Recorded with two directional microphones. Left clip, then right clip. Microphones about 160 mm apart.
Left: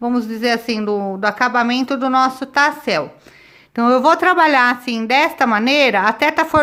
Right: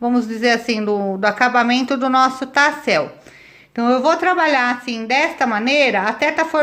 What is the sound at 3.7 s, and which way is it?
Speech, 25° left (ahead or behind).